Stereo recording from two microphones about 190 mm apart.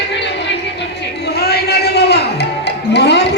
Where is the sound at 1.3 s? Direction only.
55° left (ahead or behind).